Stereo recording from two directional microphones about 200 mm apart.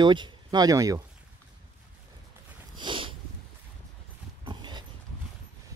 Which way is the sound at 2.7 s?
25° right (ahead or behind).